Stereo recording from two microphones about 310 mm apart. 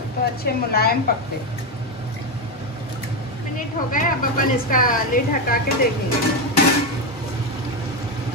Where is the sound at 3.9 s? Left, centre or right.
Left.